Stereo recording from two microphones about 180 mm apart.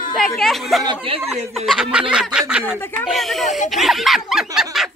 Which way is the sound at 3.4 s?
40° left (ahead or behind).